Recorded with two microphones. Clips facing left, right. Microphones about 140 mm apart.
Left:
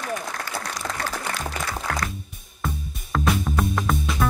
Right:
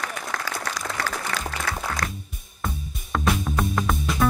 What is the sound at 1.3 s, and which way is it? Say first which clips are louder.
Music: right 1 dB; 90° right.